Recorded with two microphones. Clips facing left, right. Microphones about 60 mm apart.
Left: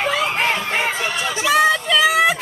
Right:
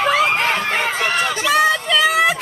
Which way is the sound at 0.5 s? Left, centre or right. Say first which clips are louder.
Right 2 dB; right.